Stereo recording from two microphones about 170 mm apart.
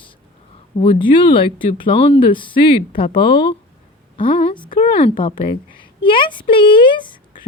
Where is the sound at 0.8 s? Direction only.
30° left (ahead or behind).